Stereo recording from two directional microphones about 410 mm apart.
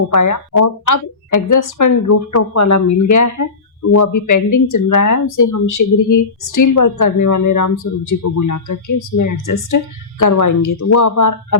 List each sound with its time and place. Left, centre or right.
0.1 s a woman's voice: left